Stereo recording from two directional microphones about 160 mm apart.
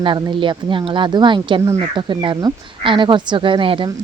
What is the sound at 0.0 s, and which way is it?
A woman's voice, 30° right (ahead or behind).